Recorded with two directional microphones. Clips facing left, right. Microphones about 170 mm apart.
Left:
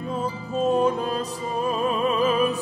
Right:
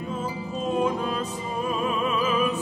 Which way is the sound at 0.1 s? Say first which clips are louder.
Left 4 dB; 35° left (ahead or behind).